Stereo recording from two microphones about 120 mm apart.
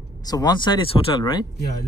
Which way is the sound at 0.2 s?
35° left (ahead or behind).